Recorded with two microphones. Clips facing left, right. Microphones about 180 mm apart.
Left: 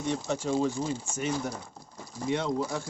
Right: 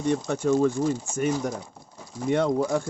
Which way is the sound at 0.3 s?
55° right (ahead or behind).